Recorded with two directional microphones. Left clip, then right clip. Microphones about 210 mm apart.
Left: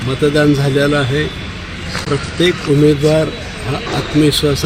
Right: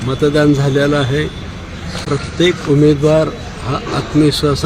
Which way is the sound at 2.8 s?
Centre (ahead or behind).